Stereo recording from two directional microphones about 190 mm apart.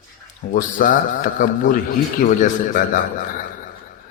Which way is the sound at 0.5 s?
45° left (ahead or behind).